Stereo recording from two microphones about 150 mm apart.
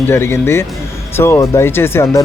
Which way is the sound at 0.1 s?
15° left (ahead or behind).